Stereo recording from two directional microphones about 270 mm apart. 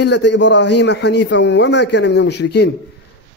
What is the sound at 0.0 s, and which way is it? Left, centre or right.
A man's voice, left.